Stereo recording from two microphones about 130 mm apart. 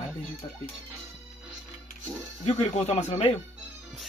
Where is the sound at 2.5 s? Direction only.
60° left (ahead or behind).